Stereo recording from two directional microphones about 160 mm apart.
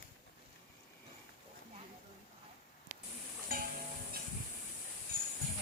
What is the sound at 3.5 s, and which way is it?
Stir, 65° right (ahead or behind).